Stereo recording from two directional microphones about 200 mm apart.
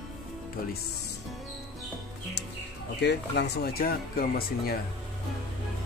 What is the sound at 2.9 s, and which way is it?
Speech, 55° left (ahead or behind).